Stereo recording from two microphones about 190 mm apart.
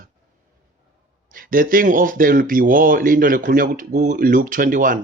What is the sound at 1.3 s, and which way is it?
Speech, 50° right (ahead or behind).